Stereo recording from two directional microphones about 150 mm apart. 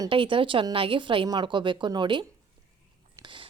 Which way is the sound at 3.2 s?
35° right (ahead or behind).